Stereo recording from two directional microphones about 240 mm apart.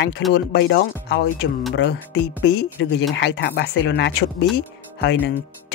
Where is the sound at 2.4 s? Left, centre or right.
Left.